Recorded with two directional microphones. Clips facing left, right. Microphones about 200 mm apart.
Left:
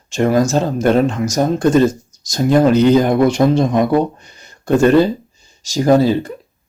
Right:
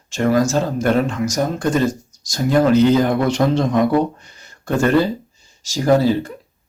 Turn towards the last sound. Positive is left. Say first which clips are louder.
# left 3 dB
turn(degrees=20)  # may be behind; listen again after turning